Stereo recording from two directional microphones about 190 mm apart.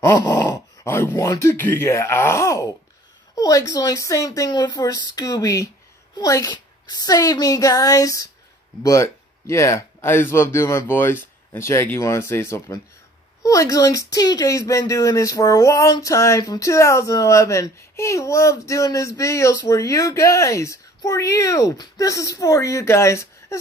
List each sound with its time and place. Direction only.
0.4 s speech: 15° left (ahead or behind)